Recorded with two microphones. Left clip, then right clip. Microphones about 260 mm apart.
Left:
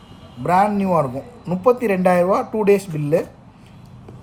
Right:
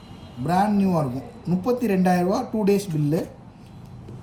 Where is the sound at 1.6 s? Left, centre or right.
Centre.